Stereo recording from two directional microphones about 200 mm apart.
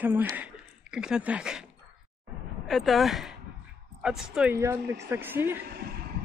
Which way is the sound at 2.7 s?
Centre (ahead or behind).